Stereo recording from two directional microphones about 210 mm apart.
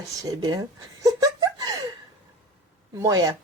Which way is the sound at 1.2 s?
20° right (ahead or behind).